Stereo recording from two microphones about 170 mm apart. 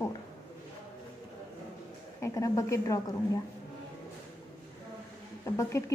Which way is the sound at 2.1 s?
15° left (ahead or behind).